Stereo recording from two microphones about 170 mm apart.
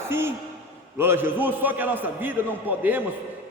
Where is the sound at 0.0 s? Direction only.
15° right (ahead or behind).